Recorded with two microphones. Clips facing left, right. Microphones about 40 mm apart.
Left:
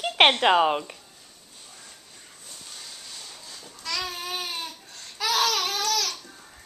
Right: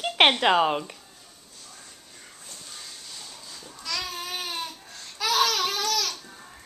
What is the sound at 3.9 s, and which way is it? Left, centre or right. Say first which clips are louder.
Baby cry: left 1 dB; centre.